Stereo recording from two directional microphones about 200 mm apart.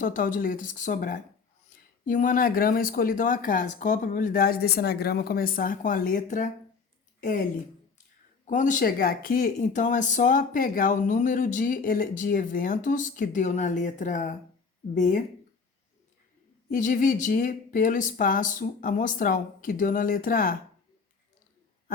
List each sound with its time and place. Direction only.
0.0 s a woman's voice: 45° left (ahead or behind)
8.4 s speech: 40° left (ahead or behind)
16.7 s speech: 40° left (ahead or behind)